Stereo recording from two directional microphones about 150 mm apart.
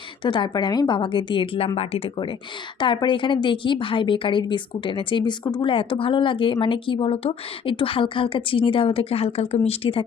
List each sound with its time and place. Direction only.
0.3 s a woman's voice: 30° left (ahead or behind)